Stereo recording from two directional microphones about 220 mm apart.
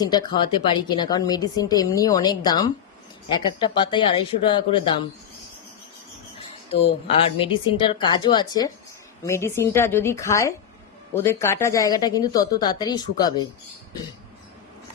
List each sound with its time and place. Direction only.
0.0 s a woman's voice: 20° left (ahead or behind)
6.7 s a woman's voice: 25° left (ahead or behind)